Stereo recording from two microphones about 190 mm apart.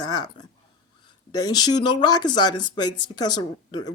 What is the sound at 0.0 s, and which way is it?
Speech, 20° left (ahead or behind).